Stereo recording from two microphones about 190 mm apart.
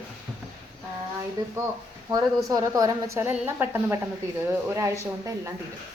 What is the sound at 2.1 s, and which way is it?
A woman's voice, 20° right (ahead or behind).